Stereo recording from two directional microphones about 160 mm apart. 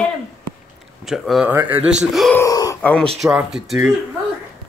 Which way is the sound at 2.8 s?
10° left (ahead or behind).